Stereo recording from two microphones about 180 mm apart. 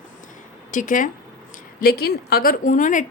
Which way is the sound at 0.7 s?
45° left (ahead or behind).